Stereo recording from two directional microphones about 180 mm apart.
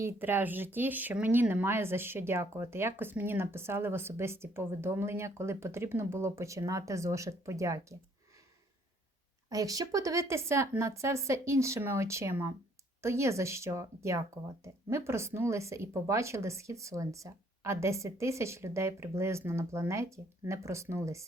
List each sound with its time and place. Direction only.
0.0 s speech: 15° right (ahead or behind)
9.5 s speech: 20° right (ahead or behind)